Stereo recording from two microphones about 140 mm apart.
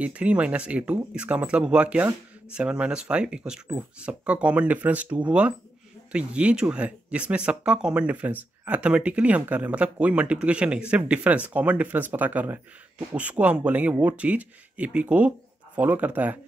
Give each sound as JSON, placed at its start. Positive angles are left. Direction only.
{"t": 0.0, "sound": "speech", "side_deg": -10}